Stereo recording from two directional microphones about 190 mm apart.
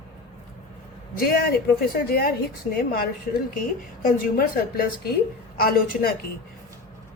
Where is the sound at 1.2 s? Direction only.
50° left (ahead or behind).